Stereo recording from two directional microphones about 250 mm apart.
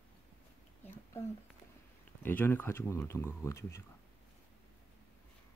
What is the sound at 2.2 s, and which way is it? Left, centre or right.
Speech, centre.